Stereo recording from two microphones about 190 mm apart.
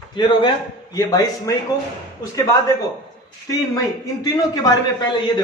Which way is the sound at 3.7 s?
20° left (ahead or behind).